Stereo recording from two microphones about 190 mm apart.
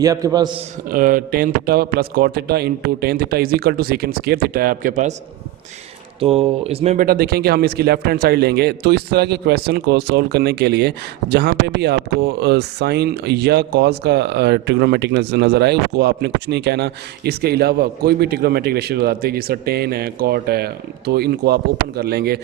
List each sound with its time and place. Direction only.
0.0 s a man's voice: 15° right (ahead or behind)
0.9 s a man's voice: 45° right (ahead or behind)
6.1 s speech: 30° right (ahead or behind); by 22.4 s 55° right (ahead or behind)